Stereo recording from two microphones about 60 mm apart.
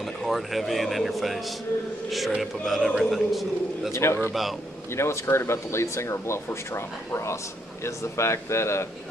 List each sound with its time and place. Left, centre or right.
0.0 s a man's voice: centre
3.9 s speech: left
4.3 s a man's voice: centre
4.9 s speech: left